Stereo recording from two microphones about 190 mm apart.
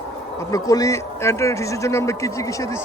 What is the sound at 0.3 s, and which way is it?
Speech, 20° left (ahead or behind).